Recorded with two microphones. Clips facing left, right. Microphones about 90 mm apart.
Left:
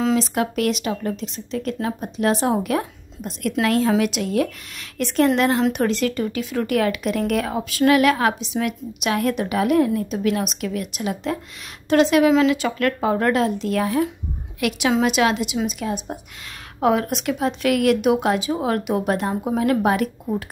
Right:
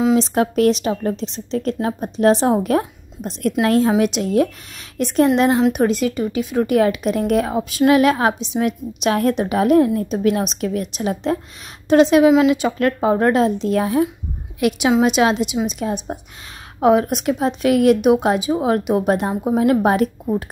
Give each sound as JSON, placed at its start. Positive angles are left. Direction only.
{"t": 0.1, "sound": "a woman's voice", "side_deg": -30}